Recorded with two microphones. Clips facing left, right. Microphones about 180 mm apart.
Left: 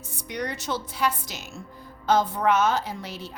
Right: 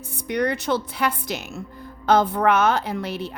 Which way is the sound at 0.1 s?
60° right (ahead or behind).